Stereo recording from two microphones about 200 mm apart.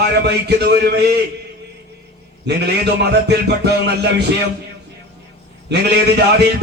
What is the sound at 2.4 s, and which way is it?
A man's voice, 55° right (ahead or behind).